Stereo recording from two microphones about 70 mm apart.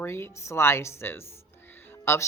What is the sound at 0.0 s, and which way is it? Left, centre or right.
A woman's voice, left.